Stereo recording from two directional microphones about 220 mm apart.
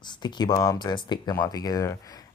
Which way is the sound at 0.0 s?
20° left (ahead or behind).